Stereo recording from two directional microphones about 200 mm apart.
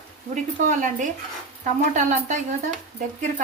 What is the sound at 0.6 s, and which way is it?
A woman's voice, 40° right (ahead or behind).